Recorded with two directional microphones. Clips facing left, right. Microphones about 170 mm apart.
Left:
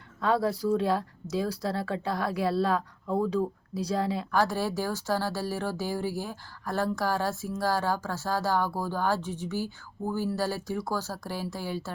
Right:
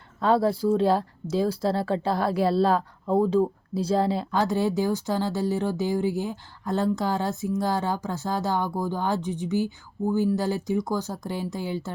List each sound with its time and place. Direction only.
0.2 s a woman's voice: 30° right (ahead or behind)